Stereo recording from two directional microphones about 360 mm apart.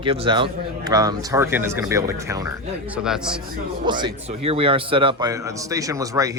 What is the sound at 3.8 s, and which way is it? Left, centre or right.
Speech, centre.